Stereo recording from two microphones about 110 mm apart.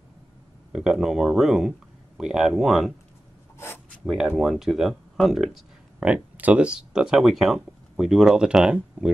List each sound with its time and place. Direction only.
0.7 s speech: 5° right (ahead or behind)
3.5 s writing: 20° left (ahead or behind)
4.0 s speech: 5° right (ahead or behind)